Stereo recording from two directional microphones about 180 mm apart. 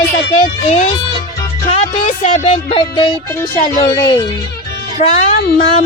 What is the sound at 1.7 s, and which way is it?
Speech, 40° left (ahead or behind).